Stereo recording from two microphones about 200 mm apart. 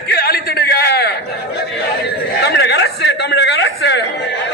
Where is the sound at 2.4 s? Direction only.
55° left (ahead or behind).